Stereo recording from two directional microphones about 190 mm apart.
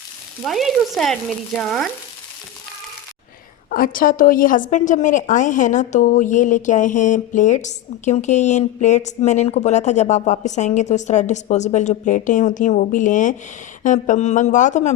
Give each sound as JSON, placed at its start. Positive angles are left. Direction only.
{"t": 0.4, "sound": "frying", "side_deg": 0}
{"t": 3.7, "sound": "a woman's voice", "side_deg": 45}